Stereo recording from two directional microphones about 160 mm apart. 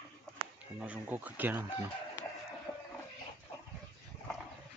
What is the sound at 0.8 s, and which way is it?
Speech, 10° right (ahead or behind).